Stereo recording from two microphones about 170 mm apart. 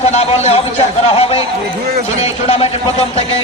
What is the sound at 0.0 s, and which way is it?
A man's voice, 40° left (ahead or behind).